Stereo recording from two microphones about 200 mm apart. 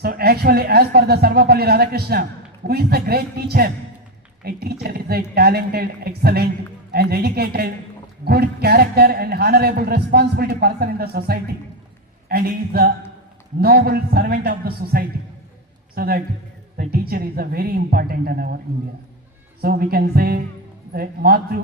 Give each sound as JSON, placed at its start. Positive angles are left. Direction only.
{"t": 0.0, "sound": "speech", "side_deg": -50}
{"t": 19.6, "sound": "speech", "side_deg": -50}